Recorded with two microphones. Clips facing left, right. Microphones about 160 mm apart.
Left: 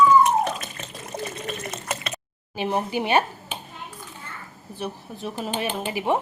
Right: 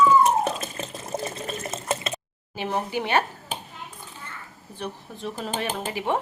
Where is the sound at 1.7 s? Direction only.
25° right (ahead or behind).